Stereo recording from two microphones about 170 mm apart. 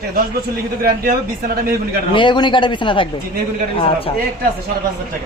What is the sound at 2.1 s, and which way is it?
A woman's voice, 30° left (ahead or behind).